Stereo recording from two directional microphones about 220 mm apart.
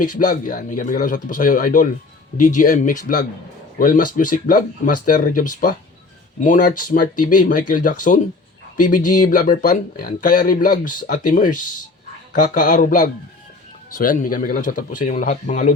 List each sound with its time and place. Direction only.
0.2 s speech: 35° left (ahead or behind)